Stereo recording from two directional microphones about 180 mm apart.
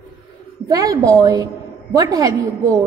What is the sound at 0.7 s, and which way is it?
A woman's voice, 20° right (ahead or behind).